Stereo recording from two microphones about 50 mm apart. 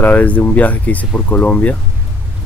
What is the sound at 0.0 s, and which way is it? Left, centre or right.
Speech, left.